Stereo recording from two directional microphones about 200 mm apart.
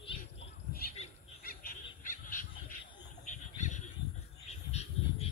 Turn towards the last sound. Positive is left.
turn(degrees=30)  # may be behind; listen again after turning